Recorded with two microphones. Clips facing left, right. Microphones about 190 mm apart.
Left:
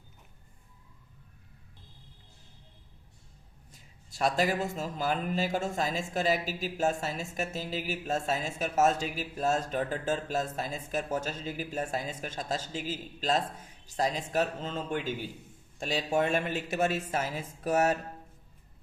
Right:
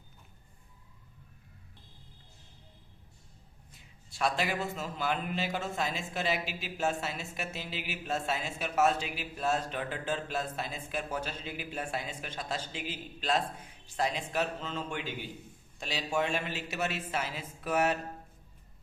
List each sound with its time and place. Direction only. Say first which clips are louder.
3.7 s a man's voice: left 2 dB; 40° left (ahead or behind)